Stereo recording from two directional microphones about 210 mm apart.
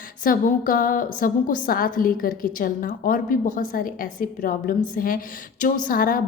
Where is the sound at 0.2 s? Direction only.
40° left (ahead or behind).